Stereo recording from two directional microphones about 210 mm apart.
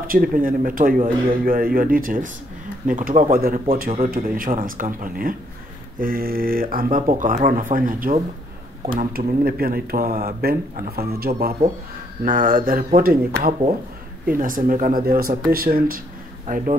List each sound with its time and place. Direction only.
0.0 s a man's voice: 40° right (ahead or behind)